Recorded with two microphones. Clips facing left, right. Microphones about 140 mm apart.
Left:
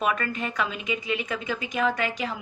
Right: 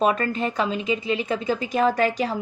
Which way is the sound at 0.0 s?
30° right (ahead or behind).